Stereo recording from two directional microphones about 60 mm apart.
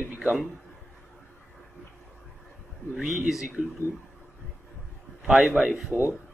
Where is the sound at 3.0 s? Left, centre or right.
Centre.